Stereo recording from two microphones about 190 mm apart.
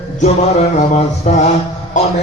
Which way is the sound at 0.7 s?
35° left (ahead or behind).